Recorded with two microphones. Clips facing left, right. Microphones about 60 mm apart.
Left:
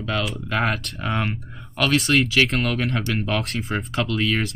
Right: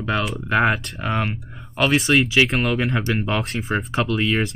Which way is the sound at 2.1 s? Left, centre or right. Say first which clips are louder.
Right 2 dB; right.